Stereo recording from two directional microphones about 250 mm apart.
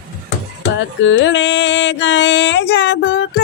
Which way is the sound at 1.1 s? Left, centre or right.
Left.